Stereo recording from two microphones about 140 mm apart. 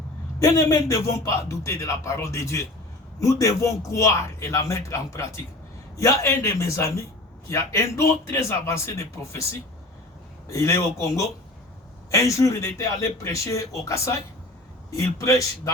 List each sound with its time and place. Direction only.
0.3 s a man's voice: 25° left (ahead or behind)